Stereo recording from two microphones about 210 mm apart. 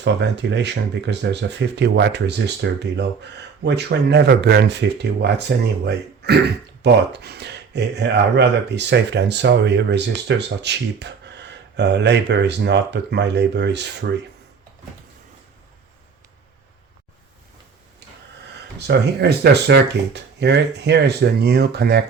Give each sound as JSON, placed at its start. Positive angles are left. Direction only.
{"t": 0.0, "sound": "speech", "side_deg": -55}
{"t": 18.9, "sound": "speech", "side_deg": -50}